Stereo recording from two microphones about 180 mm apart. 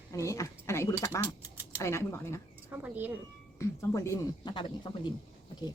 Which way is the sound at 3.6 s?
15° left (ahead or behind).